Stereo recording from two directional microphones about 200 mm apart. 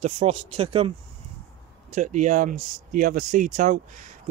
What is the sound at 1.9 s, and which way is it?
Speech, 40° right (ahead or behind).